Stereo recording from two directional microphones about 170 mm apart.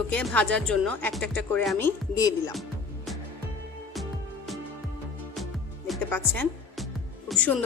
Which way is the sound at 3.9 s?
Centre (ahead or behind).